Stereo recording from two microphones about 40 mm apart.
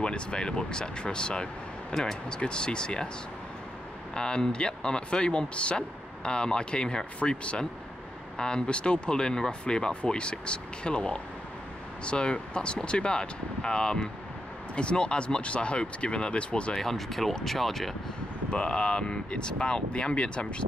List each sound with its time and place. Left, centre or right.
0.0 s speech: left
4.1 s speech: centre
16.7 s speech: centre
18.5 s speech: left